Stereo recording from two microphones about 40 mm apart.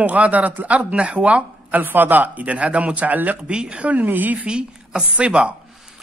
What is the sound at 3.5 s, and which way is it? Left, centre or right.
Speech, right.